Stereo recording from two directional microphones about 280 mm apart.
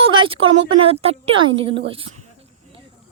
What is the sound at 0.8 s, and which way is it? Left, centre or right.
A woman's voice, right.